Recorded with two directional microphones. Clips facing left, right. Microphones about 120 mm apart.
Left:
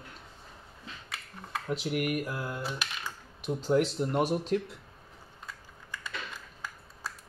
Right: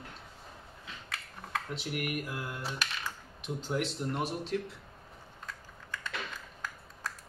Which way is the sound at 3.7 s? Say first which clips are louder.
Left 7 dB; 50° left (ahead or behind).